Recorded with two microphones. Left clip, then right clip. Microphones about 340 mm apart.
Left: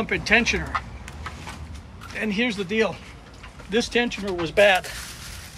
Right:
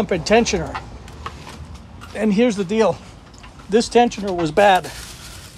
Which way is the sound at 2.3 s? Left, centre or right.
Centre.